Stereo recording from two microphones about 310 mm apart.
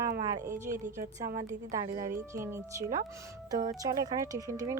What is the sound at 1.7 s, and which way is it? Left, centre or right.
Speech, centre.